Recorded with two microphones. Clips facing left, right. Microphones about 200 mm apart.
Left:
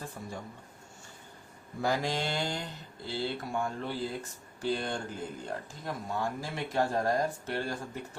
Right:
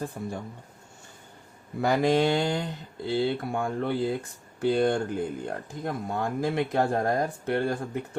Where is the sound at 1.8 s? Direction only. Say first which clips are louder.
Right 8 dB; 60° right (ahead or behind).